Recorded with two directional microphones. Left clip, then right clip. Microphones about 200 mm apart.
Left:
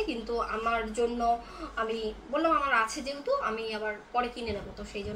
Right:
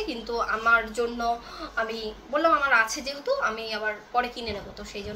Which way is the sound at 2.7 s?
15° left (ahead or behind).